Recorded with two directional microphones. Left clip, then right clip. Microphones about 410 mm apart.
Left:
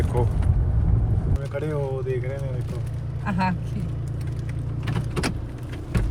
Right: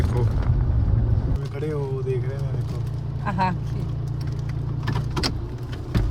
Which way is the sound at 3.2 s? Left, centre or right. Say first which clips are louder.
Right 2 dB; right.